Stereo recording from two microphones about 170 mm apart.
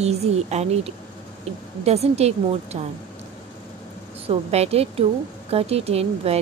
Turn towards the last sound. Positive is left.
turn(degrees=-35)  # may be behind; listen again after turning